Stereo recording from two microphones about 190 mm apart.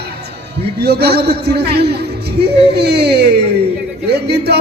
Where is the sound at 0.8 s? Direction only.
60° right (ahead or behind).